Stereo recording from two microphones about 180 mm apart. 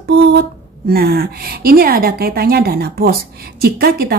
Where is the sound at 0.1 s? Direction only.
65° right (ahead or behind).